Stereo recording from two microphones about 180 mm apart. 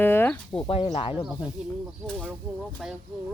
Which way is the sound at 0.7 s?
30° left (ahead or behind).